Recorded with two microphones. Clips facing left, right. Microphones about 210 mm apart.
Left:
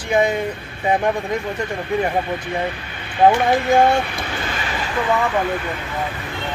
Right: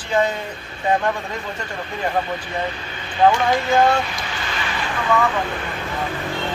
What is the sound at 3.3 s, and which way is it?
Speech, 55° left (ahead or behind).